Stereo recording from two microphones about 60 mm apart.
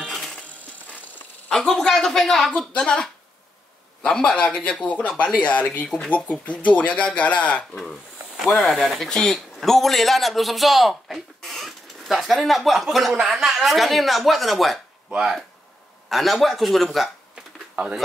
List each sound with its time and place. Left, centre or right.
1.5 s a man's voice: centre
8.4 s a man's voice: centre
16.1 s speech: centre